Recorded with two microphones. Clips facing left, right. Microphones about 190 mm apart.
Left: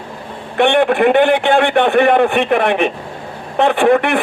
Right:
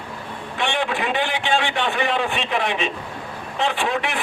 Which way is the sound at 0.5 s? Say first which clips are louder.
Left 12 dB; 60° left (ahead or behind).